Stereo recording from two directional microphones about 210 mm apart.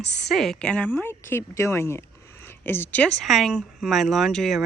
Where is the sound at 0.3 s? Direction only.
Centre (ahead or behind).